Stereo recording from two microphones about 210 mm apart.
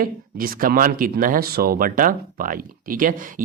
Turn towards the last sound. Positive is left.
turn(degrees=-40)  # may be behind; listen again after turning